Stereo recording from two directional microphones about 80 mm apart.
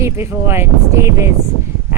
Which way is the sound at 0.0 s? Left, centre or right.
Right.